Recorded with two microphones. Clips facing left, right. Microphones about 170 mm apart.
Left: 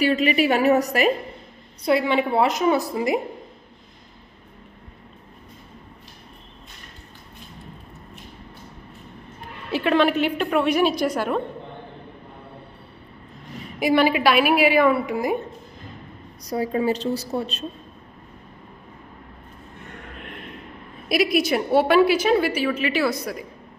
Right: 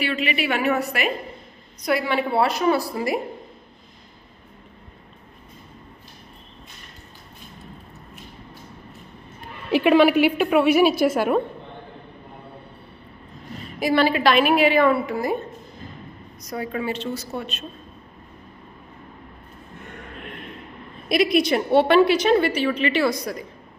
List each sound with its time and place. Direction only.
0.0 s a woman's voice: 40° left (ahead or behind)
1.8 s a woman's voice: 25° left (ahead or behind)
9.7 s a woman's voice: 15° right (ahead or behind)
13.7 s a woman's voice: 15° left (ahead or behind)
16.4 s a woman's voice: 35° left (ahead or behind)
21.1 s a woman's voice: 5° left (ahead or behind)